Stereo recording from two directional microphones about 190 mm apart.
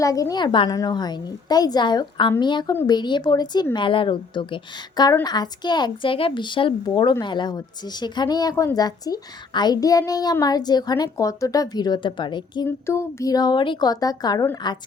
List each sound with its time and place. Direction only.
0.0 s a woman's voice: 20° left (ahead or behind)
12.6 s a woman's voice: 15° left (ahead or behind)